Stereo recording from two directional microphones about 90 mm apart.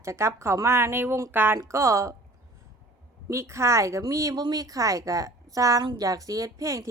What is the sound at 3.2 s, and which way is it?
A woman's voice, 30° right (ahead or behind).